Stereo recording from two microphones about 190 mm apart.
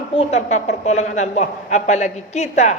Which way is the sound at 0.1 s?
35° left (ahead or behind).